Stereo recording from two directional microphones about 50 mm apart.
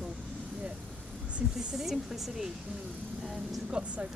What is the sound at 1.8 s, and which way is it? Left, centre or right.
Speech, centre.